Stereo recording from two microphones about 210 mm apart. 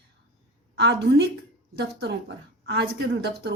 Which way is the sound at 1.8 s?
50° right (ahead or behind).